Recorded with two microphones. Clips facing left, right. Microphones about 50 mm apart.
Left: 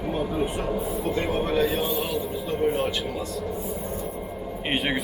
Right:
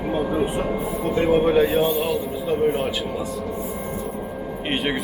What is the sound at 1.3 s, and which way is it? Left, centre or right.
Speech, right.